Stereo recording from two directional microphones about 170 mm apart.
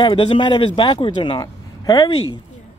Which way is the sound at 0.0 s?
30° left (ahead or behind).